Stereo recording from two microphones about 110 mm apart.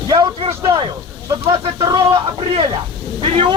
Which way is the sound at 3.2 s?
65° right (ahead or behind).